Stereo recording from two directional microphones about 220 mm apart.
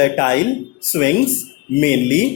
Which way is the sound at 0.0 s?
15° left (ahead or behind).